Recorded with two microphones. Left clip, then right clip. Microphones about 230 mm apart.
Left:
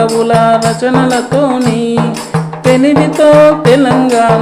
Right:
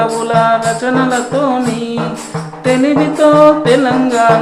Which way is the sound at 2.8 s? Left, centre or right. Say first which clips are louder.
Left 2 dB; left.